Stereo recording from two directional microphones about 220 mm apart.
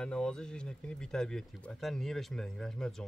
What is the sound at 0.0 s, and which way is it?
Speech, 5° left (ahead or behind).